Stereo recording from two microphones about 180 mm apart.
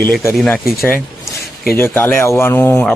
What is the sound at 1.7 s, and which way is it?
Speech, 10° left (ahead or behind).